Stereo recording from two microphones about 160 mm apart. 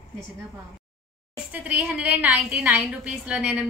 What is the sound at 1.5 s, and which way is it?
A woman's voice, 10° right (ahead or behind).